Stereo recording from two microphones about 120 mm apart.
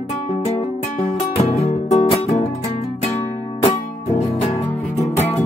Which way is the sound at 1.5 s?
60° left (ahead or behind).